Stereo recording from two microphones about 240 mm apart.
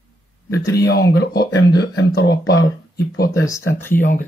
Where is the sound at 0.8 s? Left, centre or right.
Left.